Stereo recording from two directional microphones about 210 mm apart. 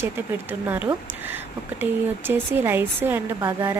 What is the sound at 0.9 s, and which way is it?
Speech, 25° right (ahead or behind).